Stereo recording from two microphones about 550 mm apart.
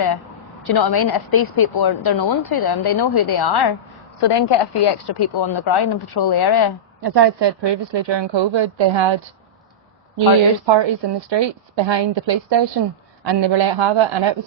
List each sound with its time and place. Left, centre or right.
0.6 s a woman's voice: left
7.0 s a woman's voice: right
10.7 s a woman's voice: right